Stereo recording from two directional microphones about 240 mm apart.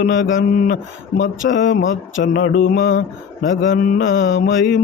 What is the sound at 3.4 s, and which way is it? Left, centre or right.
Mantra, left.